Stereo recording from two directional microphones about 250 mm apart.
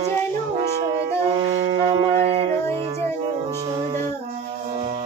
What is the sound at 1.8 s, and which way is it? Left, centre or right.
Music, right.